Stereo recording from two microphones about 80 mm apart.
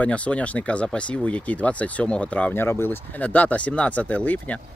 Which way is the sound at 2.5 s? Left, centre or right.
Left.